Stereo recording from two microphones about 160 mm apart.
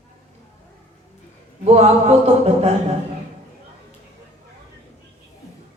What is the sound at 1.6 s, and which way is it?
Singing, 40° right (ahead or behind).